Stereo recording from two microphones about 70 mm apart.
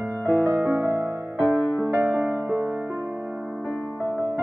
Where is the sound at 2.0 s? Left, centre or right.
Right.